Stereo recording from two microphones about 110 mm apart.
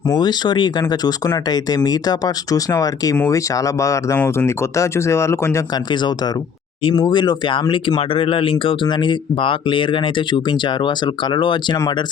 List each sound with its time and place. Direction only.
0.2 s speech: 40° left (ahead or behind); by 5.6 s 25° left (ahead or behind)
5.7 s speech: 40° left (ahead or behind)